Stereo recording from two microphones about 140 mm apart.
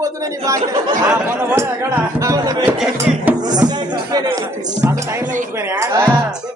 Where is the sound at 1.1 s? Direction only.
10° right (ahead or behind).